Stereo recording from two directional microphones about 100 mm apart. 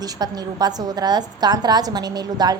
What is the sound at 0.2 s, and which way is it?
A woman's voice, 40° right (ahead or behind).